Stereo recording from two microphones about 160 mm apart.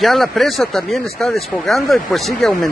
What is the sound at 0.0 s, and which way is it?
Speech, centre (ahead or behind).